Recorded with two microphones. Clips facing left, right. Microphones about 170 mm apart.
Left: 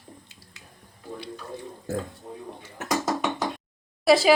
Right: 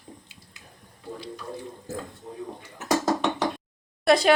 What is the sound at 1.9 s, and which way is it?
Speech, 65° left (ahead or behind).